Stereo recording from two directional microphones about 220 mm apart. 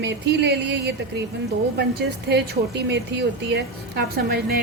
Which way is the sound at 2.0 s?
50° right (ahead or behind).